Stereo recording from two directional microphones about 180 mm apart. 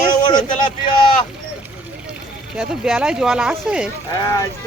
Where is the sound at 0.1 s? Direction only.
25° left (ahead or behind).